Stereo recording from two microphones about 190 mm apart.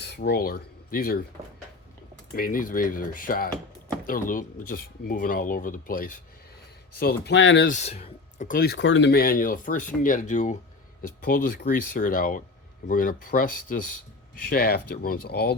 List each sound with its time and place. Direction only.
0.0 s speech: 60° left (ahead or behind)
2.3 s speech: 50° left (ahead or behind)
7.0 s speech: 70° left (ahead or behind)
7.7 s speech: 35° left (ahead or behind); by 15.5 s 60° left (ahead or behind)